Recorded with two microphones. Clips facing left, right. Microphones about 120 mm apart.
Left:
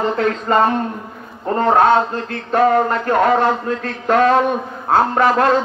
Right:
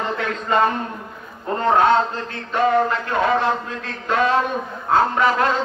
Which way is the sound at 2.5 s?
50° left (ahead or behind).